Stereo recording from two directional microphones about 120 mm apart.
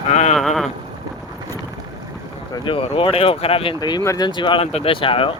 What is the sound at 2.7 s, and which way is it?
Speech, 50° left (ahead or behind).